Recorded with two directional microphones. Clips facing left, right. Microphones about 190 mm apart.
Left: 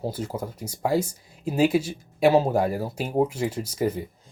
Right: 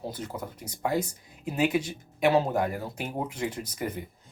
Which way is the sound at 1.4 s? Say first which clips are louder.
Left 5 dB; 30° left (ahead or behind).